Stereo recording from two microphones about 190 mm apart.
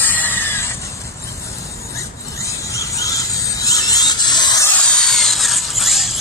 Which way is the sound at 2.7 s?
15° left (ahead or behind).